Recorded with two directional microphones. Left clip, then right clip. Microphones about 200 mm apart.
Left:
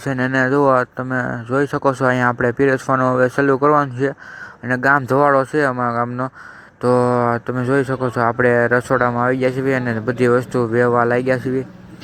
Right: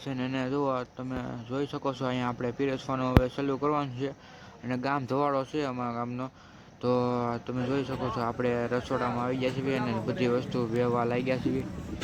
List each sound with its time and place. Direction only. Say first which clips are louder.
0.1 s speech: left 15 dB; 15° left (ahead or behind)
2.1 s speech: left 15 dB; 15° left (ahead or behind)